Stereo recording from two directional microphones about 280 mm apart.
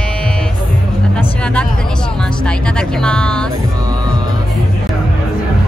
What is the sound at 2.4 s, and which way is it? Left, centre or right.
Music, centre.